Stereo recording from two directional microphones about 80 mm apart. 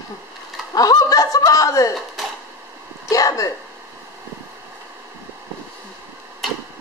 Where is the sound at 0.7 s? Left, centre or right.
Left.